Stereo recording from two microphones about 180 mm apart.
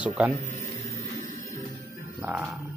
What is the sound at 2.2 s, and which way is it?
Music, 5° right (ahead or behind).